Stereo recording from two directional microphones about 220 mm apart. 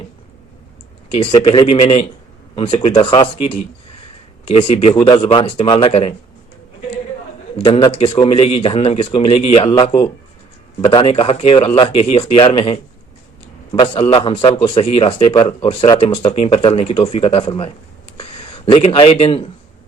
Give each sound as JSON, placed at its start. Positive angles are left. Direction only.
{"t": 1.1, "sound": "a man's voice", "side_deg": 25}
{"t": 7.6, "sound": "a man's voice", "side_deg": 20}